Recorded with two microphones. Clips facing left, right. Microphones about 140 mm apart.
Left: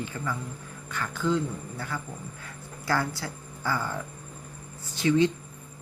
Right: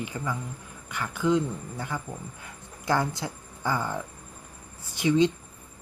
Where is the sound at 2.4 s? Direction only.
20° right (ahead or behind).